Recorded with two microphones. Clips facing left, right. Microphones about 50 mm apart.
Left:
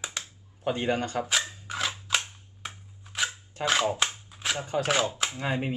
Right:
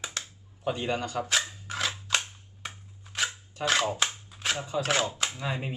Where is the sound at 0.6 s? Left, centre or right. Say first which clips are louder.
Left 2 dB; left.